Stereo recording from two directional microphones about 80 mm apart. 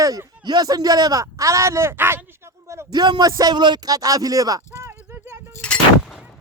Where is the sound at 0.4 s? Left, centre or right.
Right.